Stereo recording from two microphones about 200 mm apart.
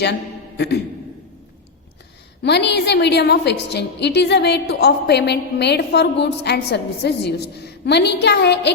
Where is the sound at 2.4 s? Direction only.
60° left (ahead or behind).